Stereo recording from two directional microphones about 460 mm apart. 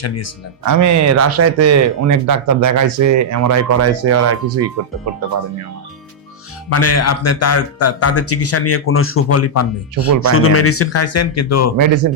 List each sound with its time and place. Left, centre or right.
0.6 s speech: right
6.7 s speech: left